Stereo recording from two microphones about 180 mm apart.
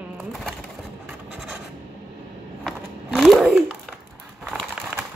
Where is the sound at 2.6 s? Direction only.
Centre (ahead or behind).